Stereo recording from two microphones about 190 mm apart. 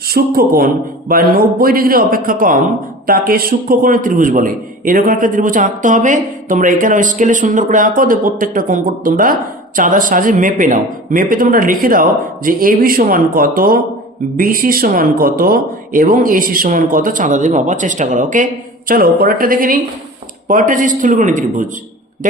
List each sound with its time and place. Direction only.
0.1 s a man's voice: 50° right (ahead or behind)